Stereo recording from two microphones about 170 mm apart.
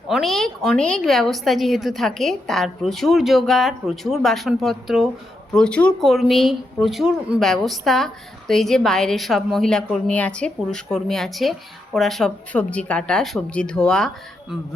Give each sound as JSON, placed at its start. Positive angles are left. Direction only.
{"t": 0.1, "sound": "speech", "side_deg": 0}